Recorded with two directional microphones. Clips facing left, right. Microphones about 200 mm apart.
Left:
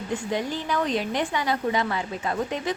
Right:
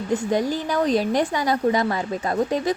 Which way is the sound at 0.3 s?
40° right (ahead or behind).